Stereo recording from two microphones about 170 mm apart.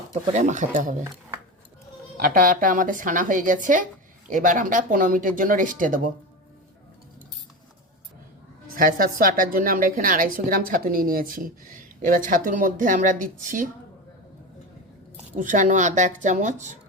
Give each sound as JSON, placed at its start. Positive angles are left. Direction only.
{"t": 0.1, "sound": "a woman's voice", "side_deg": -45}
{"t": 2.1, "sound": "a woman's voice", "side_deg": -60}
{"t": 8.7, "sound": "a woman's voice", "side_deg": -55}
{"t": 15.4, "sound": "a woman's voice", "side_deg": -50}